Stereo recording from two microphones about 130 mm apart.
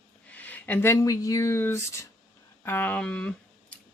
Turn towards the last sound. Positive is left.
turn(degrees=10)  # may be behind; listen again after turning